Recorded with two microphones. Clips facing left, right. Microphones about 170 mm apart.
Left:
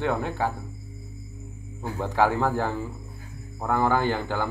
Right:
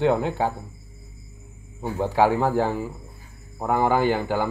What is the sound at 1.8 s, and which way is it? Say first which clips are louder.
Speech: right 3 dB; 15° right (ahead or behind).